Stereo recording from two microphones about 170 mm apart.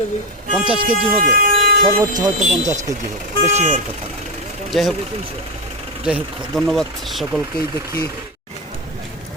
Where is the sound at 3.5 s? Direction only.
40° right (ahead or behind).